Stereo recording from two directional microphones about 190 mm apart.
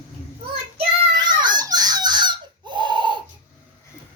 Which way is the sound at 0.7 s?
20° right (ahead or behind).